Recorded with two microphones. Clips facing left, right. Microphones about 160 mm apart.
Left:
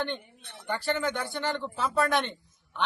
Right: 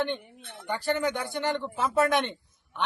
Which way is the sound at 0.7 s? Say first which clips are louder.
Right 2 dB; 15° right (ahead or behind).